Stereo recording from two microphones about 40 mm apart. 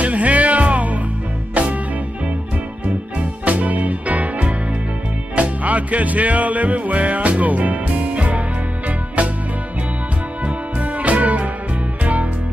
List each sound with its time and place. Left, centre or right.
0.0 s music: right
3.2 s music: right
10.4 s music: right